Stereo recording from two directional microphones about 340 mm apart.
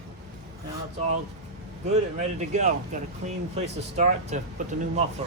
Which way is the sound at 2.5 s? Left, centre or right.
Right.